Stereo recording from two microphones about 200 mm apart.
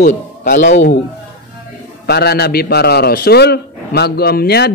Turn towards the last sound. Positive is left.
turn(degrees=55)  # may be behind; listen again after turning